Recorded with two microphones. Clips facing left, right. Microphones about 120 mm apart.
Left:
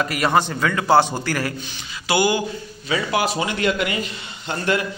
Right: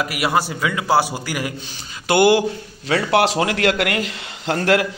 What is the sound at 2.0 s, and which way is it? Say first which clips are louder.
A man's voice: right 5 dB; 65° right (ahead or behind).